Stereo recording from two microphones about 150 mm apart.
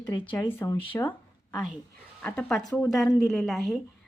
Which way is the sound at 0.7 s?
35° left (ahead or behind).